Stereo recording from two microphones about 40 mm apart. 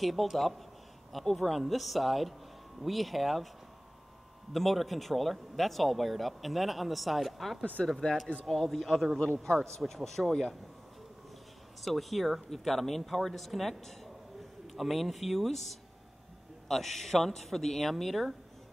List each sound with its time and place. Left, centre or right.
0.0 s speech: centre
4.5 s speech: centre
7.8 s speech: centre
8.5 s speech: centre
11.8 s speech: centre